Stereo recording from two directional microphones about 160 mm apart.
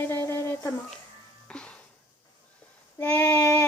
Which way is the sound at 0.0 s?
15° left (ahead or behind).